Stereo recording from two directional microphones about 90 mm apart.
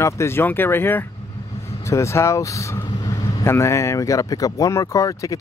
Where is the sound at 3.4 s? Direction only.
30° left (ahead or behind).